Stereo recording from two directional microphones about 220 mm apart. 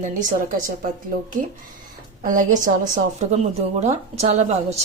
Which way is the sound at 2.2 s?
35° right (ahead or behind).